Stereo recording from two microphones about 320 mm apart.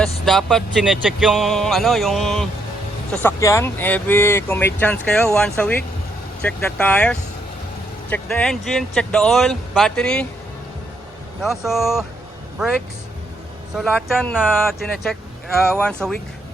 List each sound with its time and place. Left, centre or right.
0.3 s speech: centre
11.4 s speech: centre